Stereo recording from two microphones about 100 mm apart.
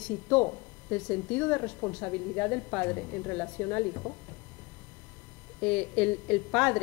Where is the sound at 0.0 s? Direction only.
15° left (ahead or behind).